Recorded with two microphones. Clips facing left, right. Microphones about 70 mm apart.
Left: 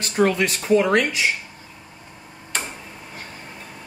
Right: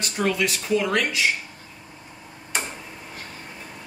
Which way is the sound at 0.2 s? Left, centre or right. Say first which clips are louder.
Left 5 dB; left.